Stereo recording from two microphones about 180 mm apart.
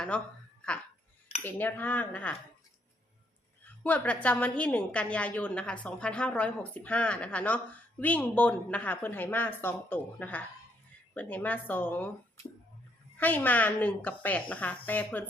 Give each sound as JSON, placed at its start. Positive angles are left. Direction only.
{"t": 0.1, "sound": "a woman's voice", "side_deg": 5}
{"t": 1.5, "sound": "a woman's voice", "side_deg": 10}
{"t": 3.6, "sound": "a woman's voice", "side_deg": 10}